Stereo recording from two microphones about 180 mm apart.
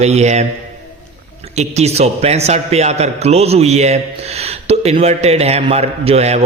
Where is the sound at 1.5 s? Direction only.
35° right (ahead or behind).